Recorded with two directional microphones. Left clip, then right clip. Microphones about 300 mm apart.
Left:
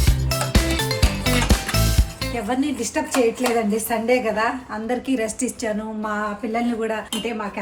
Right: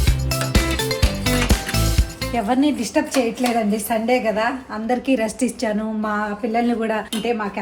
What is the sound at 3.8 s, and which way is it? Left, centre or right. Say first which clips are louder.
A woman's voice: right 2 dB; centre.